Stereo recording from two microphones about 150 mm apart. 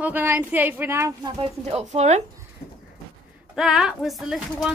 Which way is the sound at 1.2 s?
40° right (ahead or behind).